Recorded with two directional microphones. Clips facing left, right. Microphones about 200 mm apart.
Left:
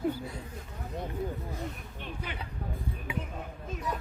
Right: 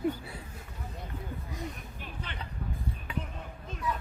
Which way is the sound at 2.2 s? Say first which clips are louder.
Left 2 dB; 10° left (ahead or behind).